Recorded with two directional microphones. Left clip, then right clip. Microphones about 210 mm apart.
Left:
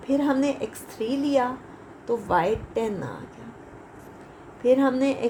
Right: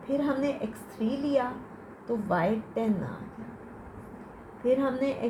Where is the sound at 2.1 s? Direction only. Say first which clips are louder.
Left 5 dB; 30° left (ahead or behind).